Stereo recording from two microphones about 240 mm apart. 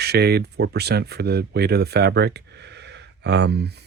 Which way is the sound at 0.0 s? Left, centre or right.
Right.